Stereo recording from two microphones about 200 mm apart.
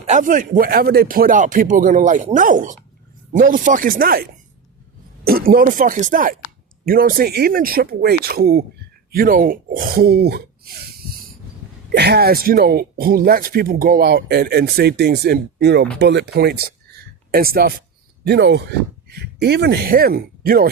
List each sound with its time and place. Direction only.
0.1 s speech: 40° right (ahead or behind)
11.9 s speech: 55° right (ahead or behind)
18.3 s speech: 60° right (ahead or behind)